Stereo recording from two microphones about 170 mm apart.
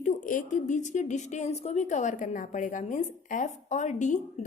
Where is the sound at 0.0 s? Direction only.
50° left (ahead or behind).